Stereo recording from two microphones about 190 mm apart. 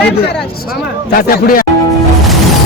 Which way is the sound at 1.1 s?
50° left (ahead or behind).